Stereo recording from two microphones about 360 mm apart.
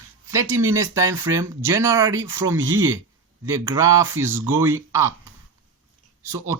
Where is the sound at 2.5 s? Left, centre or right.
Right.